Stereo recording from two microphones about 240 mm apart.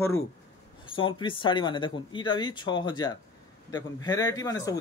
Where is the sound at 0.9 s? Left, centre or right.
Left.